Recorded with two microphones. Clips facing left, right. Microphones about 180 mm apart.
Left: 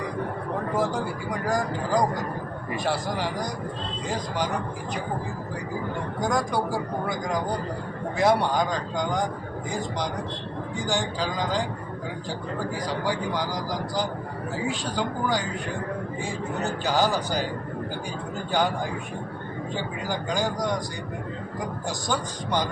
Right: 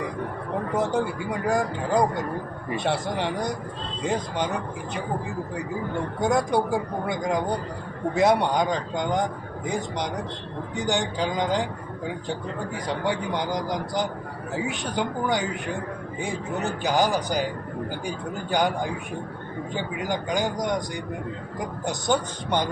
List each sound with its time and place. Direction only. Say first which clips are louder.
0.8 s a man's voice: right 4 dB; 25° right (ahead or behind)
6.1 s a man's voice: right 3 dB; 25° right (ahead or behind)
16.8 s speech: right 1 dB; 15° right (ahead or behind)
19.7 s speech: right 2 dB; 15° right (ahead or behind)
21.8 s a man's voice: right 6 dB; 20° right (ahead or behind)